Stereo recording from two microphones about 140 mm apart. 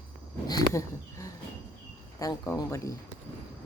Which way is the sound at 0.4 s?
25° left (ahead or behind).